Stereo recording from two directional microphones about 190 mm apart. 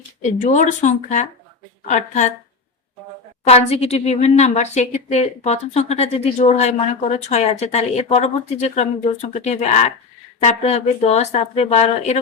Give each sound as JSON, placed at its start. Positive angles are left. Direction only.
{"t": 0.2, "sound": "a woman's voice", "side_deg": 40}
{"t": 3.4, "sound": "a woman's voice", "side_deg": 35}